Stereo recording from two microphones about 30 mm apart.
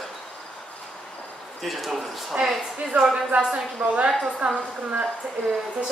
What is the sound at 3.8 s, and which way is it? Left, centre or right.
A woman's voice, right.